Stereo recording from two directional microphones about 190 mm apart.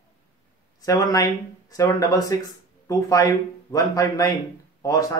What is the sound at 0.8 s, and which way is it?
Speech, 20° left (ahead or behind).